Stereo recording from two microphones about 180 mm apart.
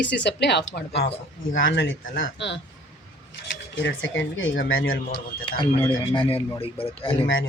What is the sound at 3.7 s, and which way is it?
Speech, 90° left.